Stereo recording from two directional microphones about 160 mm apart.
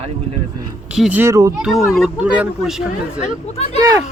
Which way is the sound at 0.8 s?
5° right (ahead or behind).